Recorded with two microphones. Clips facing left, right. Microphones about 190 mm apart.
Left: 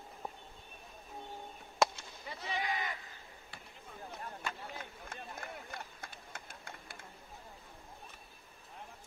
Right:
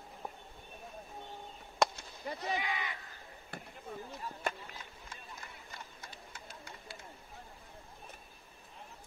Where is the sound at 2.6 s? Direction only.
45° left (ahead or behind).